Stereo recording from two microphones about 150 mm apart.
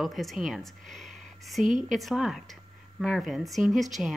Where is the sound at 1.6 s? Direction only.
60° right (ahead or behind).